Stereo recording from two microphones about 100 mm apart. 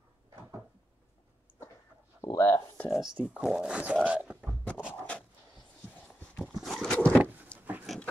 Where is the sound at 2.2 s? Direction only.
25° left (ahead or behind).